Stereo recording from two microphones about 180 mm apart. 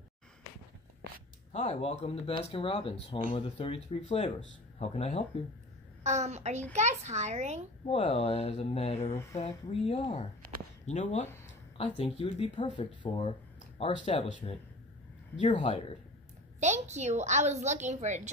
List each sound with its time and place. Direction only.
1.5 s speech: 35° left (ahead or behind)
6.0 s a woman's voice: 40° right (ahead or behind)
7.9 s speech: 35° left (ahead or behind)
12.0 s speech: 30° left (ahead or behind)
13.6 s a sound: 30° left (ahead or behind)
14.0 s speech: 30° left (ahead or behind)
16.5 s a woman's voice: 40° right (ahead or behind)